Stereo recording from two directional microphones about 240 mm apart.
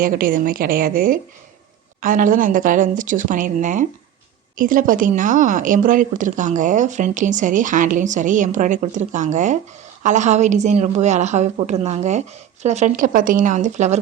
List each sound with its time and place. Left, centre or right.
0.0 s a woman's voice: right